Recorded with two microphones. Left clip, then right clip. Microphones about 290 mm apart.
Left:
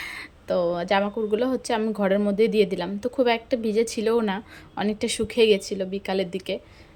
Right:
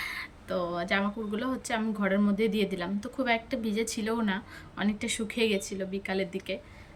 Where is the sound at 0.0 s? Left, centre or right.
Centre.